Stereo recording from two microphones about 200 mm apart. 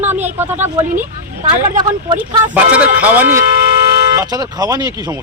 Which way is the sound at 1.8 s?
20° right (ahead or behind).